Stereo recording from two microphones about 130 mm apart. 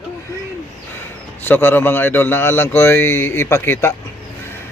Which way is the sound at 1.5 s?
15° left (ahead or behind).